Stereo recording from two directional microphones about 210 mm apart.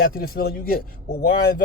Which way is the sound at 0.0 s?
45° left (ahead or behind).